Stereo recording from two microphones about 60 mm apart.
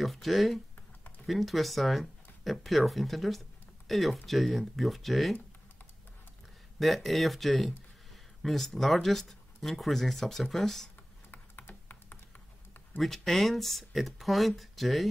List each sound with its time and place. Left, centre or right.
0.0 s speech: centre
6.8 s speech: centre
11.2 s typing: left
13.0 s speech: centre